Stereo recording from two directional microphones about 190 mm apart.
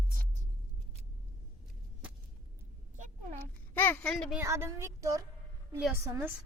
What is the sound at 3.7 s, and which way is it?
Speech, 10° left (ahead or behind).